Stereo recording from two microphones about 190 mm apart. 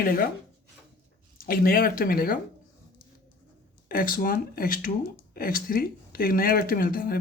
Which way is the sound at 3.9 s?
45° left (ahead or behind).